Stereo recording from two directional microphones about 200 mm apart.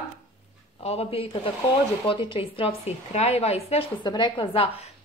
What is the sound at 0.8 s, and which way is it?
A woman's voice, 30° left (ahead or behind).